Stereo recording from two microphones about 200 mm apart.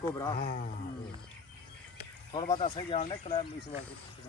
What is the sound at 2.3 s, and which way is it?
Speech, 25° left (ahead or behind).